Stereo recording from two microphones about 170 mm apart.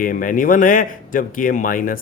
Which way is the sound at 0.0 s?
50° left (ahead or behind).